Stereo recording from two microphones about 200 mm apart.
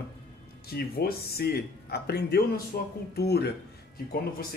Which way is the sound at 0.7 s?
50° left (ahead or behind).